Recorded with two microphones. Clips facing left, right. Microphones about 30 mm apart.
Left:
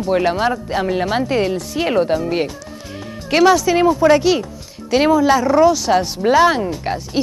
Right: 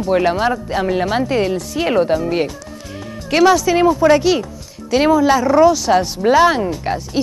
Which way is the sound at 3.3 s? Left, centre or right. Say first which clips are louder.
Even; centre.